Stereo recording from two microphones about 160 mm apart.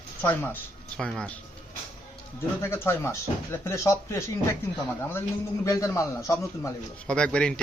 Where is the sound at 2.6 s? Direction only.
15° left (ahead or behind).